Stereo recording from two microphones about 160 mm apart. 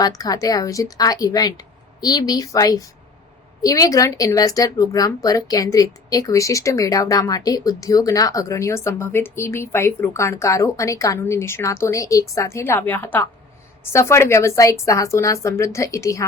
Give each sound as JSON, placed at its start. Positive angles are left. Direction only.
{"t": 0.0, "sound": "speech", "side_deg": 20}